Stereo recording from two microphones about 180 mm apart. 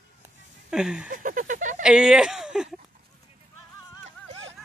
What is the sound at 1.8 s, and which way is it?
Speech, 5° right (ahead or behind).